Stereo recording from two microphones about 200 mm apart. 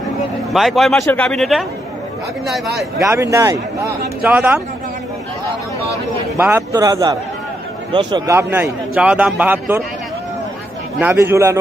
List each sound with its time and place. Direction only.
0.5 s speech: centre (ahead or behind)
3.0 s a man's voice: 15° right (ahead or behind)
6.3 s a man's voice: 10° right (ahead or behind)
11.0 s a man's voice: 10° right (ahead or behind)